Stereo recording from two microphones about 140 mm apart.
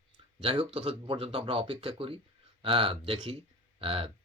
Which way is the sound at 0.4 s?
40° right (ahead or behind).